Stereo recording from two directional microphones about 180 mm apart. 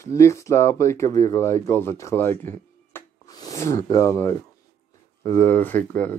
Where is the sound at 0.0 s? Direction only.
15° left (ahead or behind).